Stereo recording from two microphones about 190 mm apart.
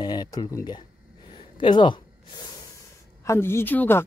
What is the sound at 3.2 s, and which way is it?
Speech, 15° left (ahead or behind).